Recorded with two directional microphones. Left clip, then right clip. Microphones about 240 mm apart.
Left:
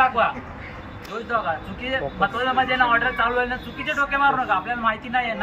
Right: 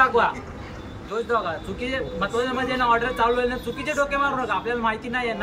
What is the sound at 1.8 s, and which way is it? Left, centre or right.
A man's voice, centre.